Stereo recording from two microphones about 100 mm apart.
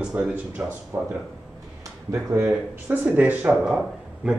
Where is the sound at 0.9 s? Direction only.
30° right (ahead or behind).